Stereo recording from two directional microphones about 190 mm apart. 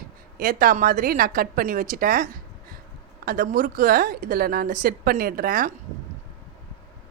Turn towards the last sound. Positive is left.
turn(degrees=-50)  # may be behind; listen again after turning